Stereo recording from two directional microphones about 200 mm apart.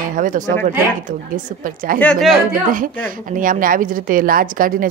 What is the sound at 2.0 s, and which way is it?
Speech, 5° left (ahead or behind).